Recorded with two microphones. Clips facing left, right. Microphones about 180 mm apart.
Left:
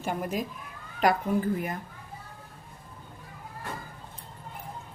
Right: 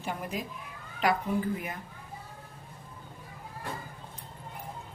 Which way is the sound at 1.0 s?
45° left (ahead or behind).